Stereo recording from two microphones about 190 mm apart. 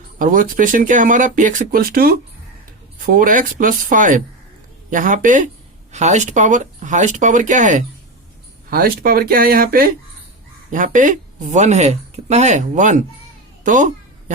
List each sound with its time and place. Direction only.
0.2 s speech: 45° right (ahead or behind)
8.7 s speech: 50° right (ahead or behind)
13.7 s cat: 40° right (ahead or behind)